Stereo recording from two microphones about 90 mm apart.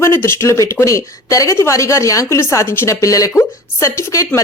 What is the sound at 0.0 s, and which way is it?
A woman's voice, 30° left (ahead or behind).